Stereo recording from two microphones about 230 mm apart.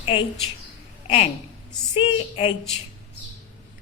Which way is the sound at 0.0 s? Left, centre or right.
Left.